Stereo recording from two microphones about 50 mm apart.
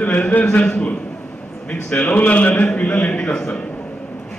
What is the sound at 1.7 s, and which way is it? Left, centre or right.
A man's voice, left.